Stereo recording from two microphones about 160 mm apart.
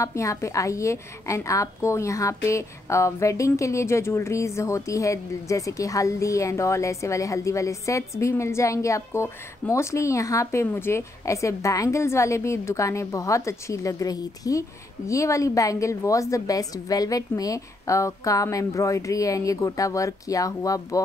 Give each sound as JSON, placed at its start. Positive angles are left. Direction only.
{"t": 0.0, "sound": "a woman's voice", "side_deg": 20}